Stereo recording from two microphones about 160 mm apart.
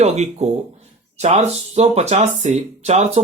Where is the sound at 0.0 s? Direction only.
45° right (ahead or behind).